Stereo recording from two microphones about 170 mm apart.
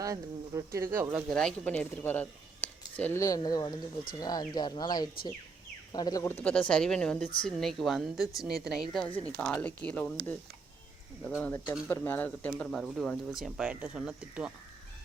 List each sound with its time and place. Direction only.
0.0 s speech: 20° right (ahead or behind)
1.3 s speech: 5° left (ahead or behind)
11.3 s speech: 10° left (ahead or behind); by 14.5 s 5° right (ahead or behind)